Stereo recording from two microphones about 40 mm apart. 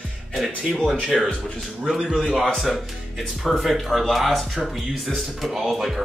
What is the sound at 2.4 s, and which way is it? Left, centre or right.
Speech, centre.